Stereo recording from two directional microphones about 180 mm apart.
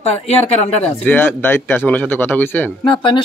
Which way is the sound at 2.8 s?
25° left (ahead or behind).